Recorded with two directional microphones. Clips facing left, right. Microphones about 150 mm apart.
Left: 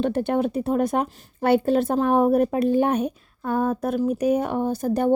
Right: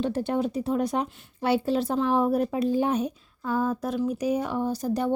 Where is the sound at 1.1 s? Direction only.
40° left (ahead or behind).